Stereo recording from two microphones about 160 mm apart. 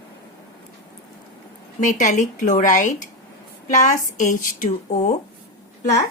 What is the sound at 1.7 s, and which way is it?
Speech, 50° left (ahead or behind).